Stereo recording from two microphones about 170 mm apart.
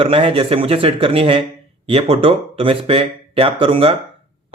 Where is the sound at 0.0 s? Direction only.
30° right (ahead or behind).